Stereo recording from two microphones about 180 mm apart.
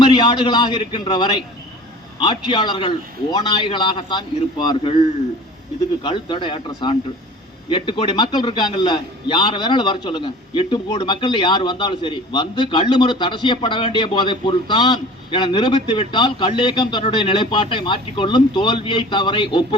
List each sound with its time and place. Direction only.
0.0 s a man's voice: 25° left (ahead or behind)
6.0 s a man's voice: 25° left (ahead or behind)